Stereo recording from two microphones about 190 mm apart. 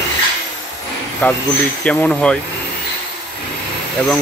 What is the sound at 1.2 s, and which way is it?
Speech, 10° left (ahead or behind).